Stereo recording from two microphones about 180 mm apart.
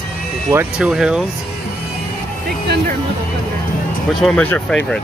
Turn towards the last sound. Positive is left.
turn(degrees=5)  # may be behind; listen again after turning